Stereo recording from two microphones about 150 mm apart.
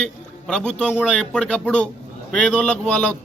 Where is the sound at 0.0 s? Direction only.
5° left (ahead or behind).